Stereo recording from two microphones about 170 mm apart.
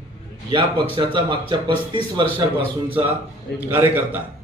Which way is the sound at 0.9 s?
25° right (ahead or behind).